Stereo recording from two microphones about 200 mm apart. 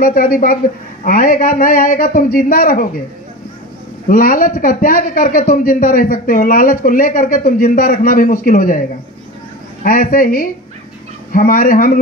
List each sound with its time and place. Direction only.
0.0 s a man's voice: 45° left (ahead or behind)
4.1 s a man's voice: 45° left (ahead or behind)
9.8 s a man's voice: 45° left (ahead or behind)